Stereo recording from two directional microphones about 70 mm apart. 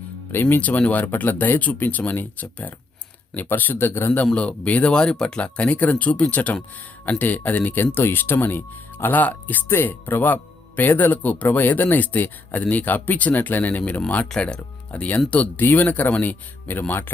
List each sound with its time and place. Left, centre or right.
0.5 s speech: left
14.3 s speech: centre; by 17.1 s left